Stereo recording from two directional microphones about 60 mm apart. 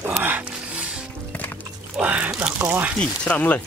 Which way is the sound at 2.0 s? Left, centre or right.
Right.